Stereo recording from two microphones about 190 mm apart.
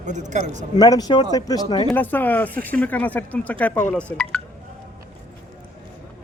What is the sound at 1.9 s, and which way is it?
Speech, 10° left (ahead or behind).